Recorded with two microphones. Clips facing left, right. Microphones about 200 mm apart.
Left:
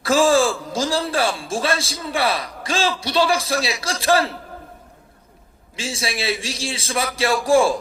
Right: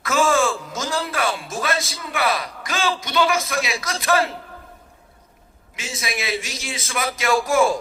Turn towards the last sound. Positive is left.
turn(degrees=30)  # may be behind; listen again after turning